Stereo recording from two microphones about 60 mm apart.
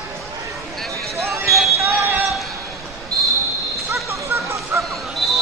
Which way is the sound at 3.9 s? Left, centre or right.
Right.